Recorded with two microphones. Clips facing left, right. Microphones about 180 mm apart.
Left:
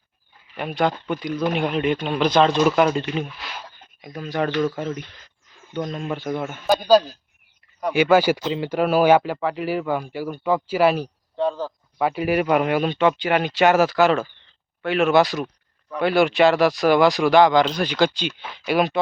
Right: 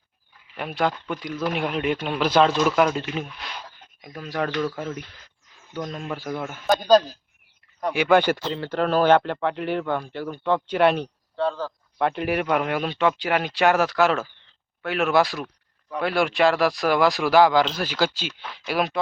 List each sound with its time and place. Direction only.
0.5 s speech: centre (ahead or behind)
11.3 s a sound: 15° left (ahead or behind)
11.9 s speech: 5° left (ahead or behind)